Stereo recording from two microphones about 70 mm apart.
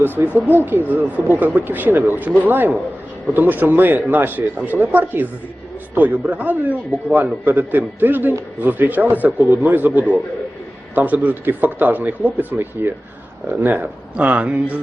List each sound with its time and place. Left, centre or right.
0.0 s speech: right
14.2 s speech: centre